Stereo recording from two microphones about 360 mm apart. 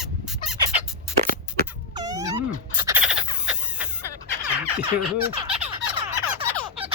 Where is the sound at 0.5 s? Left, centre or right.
Centre.